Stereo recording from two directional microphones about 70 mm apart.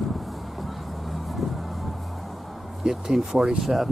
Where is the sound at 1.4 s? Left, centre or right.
Centre.